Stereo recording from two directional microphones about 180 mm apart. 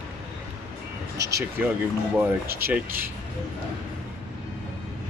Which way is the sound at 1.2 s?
15° right (ahead or behind).